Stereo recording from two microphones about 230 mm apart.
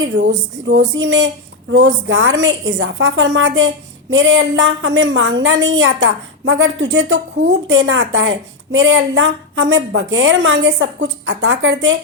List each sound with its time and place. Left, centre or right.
0.0 s a woman's voice: right